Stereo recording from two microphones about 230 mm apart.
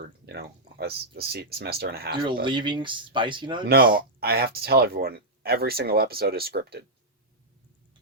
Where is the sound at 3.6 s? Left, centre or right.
Right.